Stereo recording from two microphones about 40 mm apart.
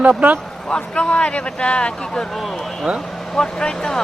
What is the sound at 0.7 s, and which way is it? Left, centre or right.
Speech, left.